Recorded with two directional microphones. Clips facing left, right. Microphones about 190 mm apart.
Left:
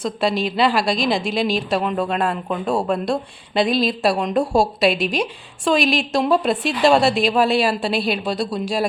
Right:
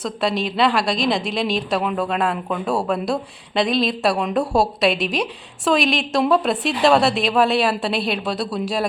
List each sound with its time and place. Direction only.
0.0 s speech: centre (ahead or behind)